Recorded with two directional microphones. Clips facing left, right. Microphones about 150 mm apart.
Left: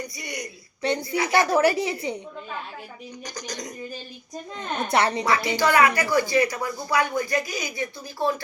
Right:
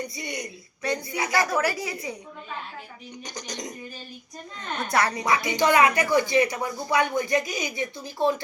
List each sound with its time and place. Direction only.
0.2 s speech: 25° right (ahead or behind)
0.8 s a woman's voice: 30° left (ahead or behind)
3.2 s speech: 20° right (ahead or behind)
4.8 s a woman's voice: 25° left (ahead or behind)
5.2 s music: 20° right (ahead or behind)
5.5 s speech: 20° right (ahead or behind)